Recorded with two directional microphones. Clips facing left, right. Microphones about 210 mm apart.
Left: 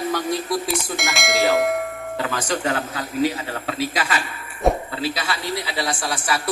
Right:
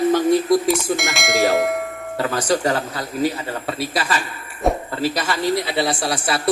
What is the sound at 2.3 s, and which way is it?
A man's voice, 40° right (ahead or behind).